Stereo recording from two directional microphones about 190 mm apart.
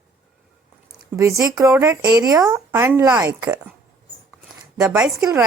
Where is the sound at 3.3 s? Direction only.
10° right (ahead or behind).